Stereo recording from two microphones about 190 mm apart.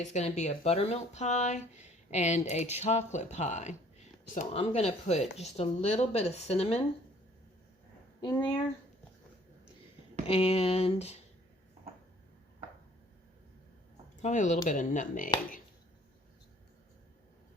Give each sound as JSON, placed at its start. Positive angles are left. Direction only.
{"t": 0.0, "sound": "speech", "side_deg": 35}
{"t": 8.2, "sound": "speech", "side_deg": 25}
{"t": 10.2, "sound": "speech", "side_deg": 30}
{"t": 14.2, "sound": "speech", "side_deg": 40}